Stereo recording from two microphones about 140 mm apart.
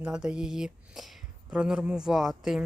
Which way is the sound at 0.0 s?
5° right (ahead or behind).